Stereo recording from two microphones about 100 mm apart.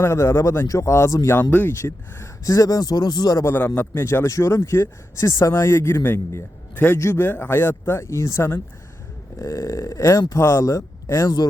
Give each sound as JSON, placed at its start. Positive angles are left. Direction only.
{"t": 0.0, "sound": "speech", "side_deg": 30}
{"t": 1.4, "sound": "speech", "side_deg": 20}
{"t": 3.4, "sound": "speech", "side_deg": 20}